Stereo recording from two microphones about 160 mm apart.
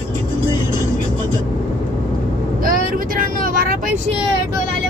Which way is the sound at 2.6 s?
60° right (ahead or behind).